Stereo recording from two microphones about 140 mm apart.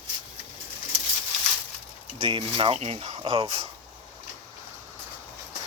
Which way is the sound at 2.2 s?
40° right (ahead or behind).